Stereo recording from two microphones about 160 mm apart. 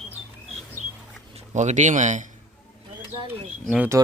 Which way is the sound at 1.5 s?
45° right (ahead or behind).